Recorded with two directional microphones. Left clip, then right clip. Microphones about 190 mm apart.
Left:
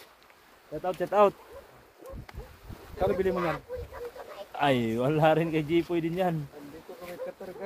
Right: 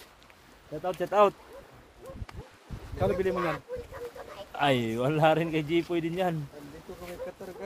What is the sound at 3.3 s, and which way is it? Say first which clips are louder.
Speech: even; 20° right (ahead or behind).